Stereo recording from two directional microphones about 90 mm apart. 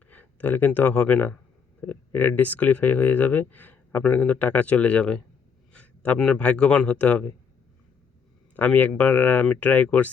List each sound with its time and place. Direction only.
0.1 s a man's voice: 20° left (ahead or behind)
8.5 s speech: 15° left (ahead or behind)